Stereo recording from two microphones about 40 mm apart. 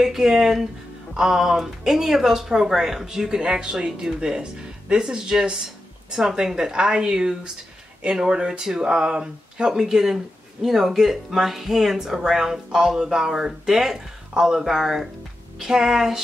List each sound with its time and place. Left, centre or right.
0.0 s speech: centre